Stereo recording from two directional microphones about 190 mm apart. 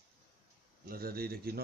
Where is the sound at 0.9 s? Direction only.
50° right (ahead or behind).